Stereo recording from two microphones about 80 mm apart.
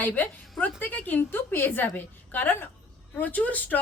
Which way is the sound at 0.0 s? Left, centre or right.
Left.